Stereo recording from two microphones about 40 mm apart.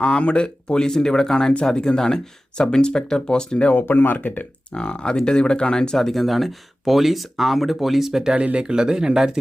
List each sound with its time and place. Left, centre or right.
0.0 s speech: left
3.8 s speech: left
4.7 s speech: left
6.0 s speech: centre
8.5 s speech: right